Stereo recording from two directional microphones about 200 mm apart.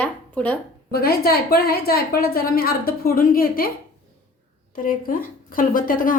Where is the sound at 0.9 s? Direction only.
50° left (ahead or behind).